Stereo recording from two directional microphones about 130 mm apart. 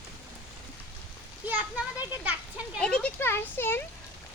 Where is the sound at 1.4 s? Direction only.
15° right (ahead or behind).